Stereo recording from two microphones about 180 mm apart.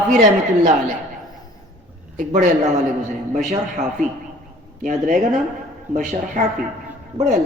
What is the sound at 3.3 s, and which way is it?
Speech, 40° right (ahead or behind).